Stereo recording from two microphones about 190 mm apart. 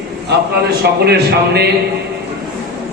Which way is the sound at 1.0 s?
55° right (ahead or behind).